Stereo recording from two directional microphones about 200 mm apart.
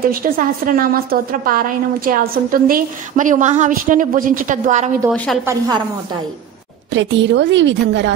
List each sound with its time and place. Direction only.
0.1 s a woman's voice: 45° right (ahead or behind)
5.1 s a woman's voice: 5° left (ahead or behind)
5.4 s a woman's voice: 15° right (ahead or behind)
6.9 s a woman's voice: 65° right (ahead or behind)